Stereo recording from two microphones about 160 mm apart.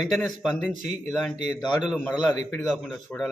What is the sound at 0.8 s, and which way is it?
Speech, 45° right (ahead or behind).